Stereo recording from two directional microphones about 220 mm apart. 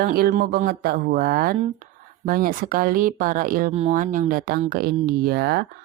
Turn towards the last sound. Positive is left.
turn(degrees=-45)  # may be behind; listen again after turning